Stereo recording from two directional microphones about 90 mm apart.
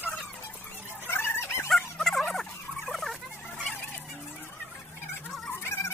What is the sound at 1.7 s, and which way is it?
Fowl, 5° left (ahead or behind).